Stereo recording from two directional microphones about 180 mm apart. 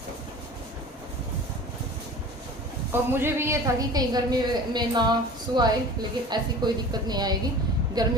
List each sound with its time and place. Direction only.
2.9 s a woman's voice: 15° right (ahead or behind)